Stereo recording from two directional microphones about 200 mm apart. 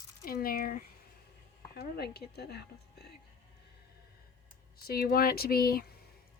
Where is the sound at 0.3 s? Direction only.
50° left (ahead or behind).